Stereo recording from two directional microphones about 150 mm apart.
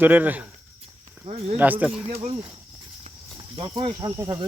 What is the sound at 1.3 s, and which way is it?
Cricket, 45° right (ahead or behind).